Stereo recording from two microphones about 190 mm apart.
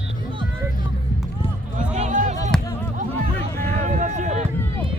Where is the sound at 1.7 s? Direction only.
40° right (ahead or behind).